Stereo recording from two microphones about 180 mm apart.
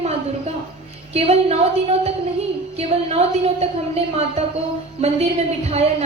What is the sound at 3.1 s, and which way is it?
A woman's voice, 35° right (ahead or behind).